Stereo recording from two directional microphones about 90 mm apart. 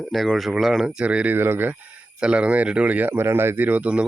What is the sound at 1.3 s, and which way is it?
Speech, 25° right (ahead or behind).